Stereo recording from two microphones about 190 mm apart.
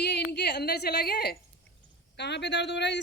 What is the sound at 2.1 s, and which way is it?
Speech, 65° left (ahead or behind).